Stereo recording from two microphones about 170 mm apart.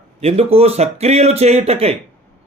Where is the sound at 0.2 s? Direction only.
35° right (ahead or behind).